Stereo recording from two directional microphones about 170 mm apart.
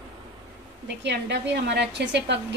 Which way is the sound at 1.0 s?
85° right.